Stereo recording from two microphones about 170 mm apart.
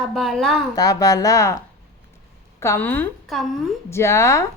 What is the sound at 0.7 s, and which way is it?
Speech, 20° left (ahead or behind).